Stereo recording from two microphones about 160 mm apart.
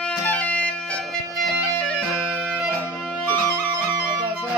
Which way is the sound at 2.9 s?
10° left (ahead or behind).